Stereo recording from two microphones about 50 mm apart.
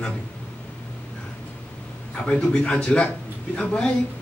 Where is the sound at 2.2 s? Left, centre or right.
Centre.